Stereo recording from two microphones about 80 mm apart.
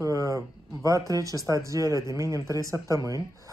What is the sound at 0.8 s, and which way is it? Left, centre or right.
Speech, right.